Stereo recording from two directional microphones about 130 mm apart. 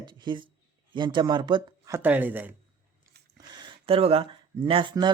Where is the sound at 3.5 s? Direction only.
40° right (ahead or behind).